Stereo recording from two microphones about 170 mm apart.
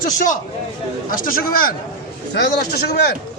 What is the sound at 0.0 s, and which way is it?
A man's voice, 50° left (ahead or behind).